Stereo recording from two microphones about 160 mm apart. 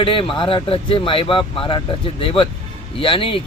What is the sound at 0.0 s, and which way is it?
Speech, 35° left (ahead or behind).